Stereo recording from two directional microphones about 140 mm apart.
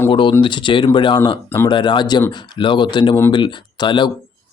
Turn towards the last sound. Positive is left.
turn(degrees=35)  # may be behind; listen again after turning